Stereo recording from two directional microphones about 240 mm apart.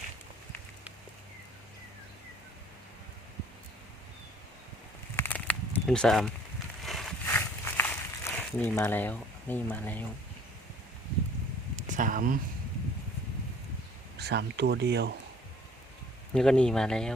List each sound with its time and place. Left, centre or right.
5.1 s a sound: centre
7.3 s walk: centre
11.8 s speech: right
14.2 s speech: right
16.3 s speech: centre